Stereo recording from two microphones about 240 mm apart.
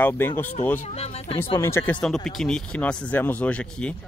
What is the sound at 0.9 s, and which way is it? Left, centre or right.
Speech, left.